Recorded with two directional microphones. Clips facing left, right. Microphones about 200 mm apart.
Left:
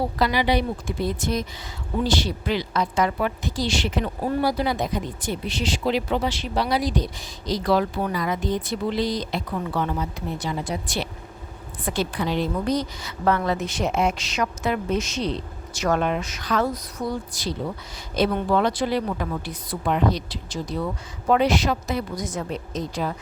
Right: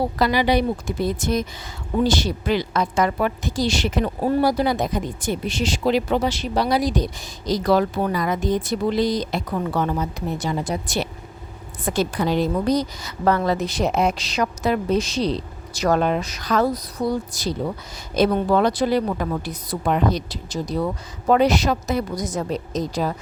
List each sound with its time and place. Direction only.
0.2 s a woman's voice: 45° right (ahead or behind)